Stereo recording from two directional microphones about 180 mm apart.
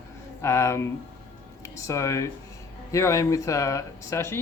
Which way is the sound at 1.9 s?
15° left (ahead or behind).